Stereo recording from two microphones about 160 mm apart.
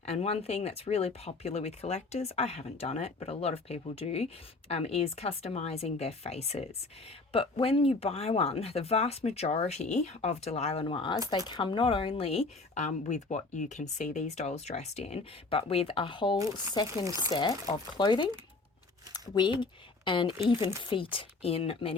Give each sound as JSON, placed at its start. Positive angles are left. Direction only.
{"t": 0.0, "sound": "speech", "side_deg": 40}
{"t": 17.0, "sound": "speech", "side_deg": -20}
{"t": 17.2, "sound": "speech", "side_deg": 30}
{"t": 19.3, "sound": "speech", "side_deg": 30}